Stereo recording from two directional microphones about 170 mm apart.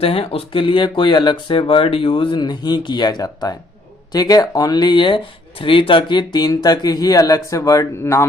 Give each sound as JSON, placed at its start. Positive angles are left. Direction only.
{"t": 0.0, "sound": "speech", "side_deg": 30}